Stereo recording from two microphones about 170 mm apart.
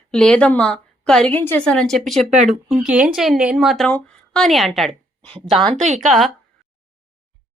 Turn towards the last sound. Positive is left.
turn(degrees=-45)  # may be behind; listen again after turning